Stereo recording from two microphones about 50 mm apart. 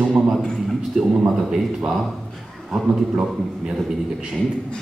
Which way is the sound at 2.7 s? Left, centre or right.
Centre.